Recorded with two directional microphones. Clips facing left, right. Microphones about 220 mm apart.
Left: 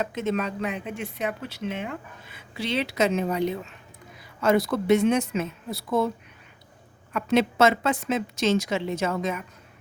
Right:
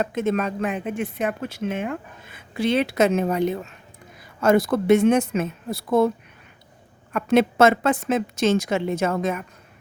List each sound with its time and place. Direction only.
0.0 s speech: 50° right (ahead or behind)
7.1 s speech: 50° right (ahead or behind)